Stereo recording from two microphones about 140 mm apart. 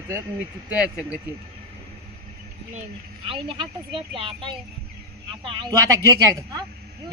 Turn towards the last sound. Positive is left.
turn(degrees=-20)  # may be behind; listen again after turning